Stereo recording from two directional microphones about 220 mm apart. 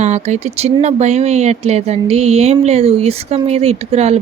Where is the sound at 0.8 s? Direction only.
30° right (ahead or behind).